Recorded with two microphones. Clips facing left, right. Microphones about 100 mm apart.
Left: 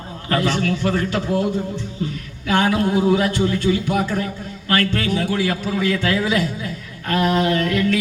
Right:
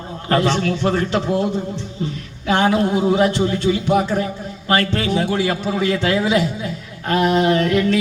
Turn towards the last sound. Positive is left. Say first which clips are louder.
# right 3 dB
turn(degrees=-25)  # may be behind; listen again after turning